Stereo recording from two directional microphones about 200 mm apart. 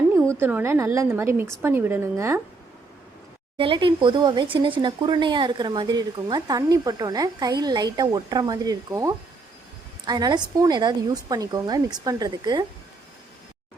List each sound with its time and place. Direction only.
0.3 s a woman's voice: 10° right (ahead or behind)
3.6 s speech: 25° right (ahead or behind)